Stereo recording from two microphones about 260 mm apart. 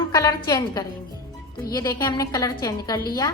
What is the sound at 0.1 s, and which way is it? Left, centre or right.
A woman's voice, centre.